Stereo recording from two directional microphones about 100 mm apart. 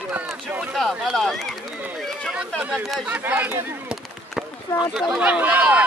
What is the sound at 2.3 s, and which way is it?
Speech, 5° right (ahead or behind).